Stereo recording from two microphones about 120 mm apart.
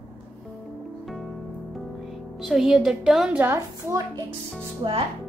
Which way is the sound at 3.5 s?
25° right (ahead or behind).